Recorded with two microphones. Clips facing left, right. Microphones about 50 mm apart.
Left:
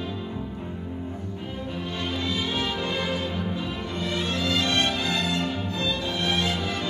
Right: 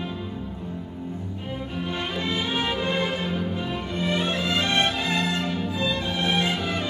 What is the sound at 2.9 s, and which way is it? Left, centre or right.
Music, right.